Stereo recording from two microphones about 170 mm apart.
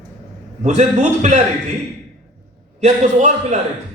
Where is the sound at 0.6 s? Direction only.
45° right (ahead or behind).